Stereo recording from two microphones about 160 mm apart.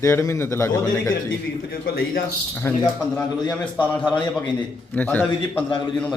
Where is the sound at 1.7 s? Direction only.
65° left (ahead or behind).